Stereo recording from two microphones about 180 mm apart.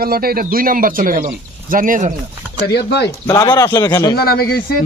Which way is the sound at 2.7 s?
65° left (ahead or behind).